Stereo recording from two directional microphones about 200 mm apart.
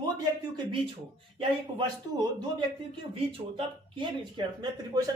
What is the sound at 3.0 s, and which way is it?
Speech, 25° right (ahead or behind).